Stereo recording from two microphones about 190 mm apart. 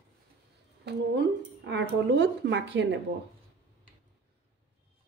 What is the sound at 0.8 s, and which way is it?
Speech, 65° right (ahead or behind).